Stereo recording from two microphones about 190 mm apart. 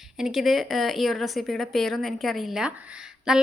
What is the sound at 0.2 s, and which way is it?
A woman's voice, centre (ahead or behind).